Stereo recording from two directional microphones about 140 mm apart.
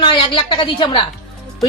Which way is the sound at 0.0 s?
35° left (ahead or behind).